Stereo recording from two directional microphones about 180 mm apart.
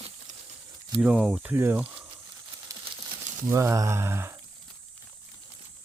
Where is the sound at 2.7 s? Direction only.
20° right (ahead or behind).